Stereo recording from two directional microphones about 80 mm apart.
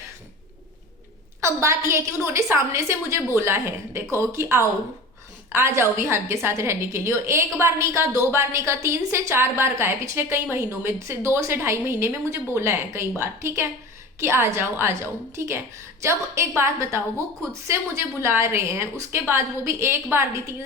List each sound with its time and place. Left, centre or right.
1.4 s a woman's voice: right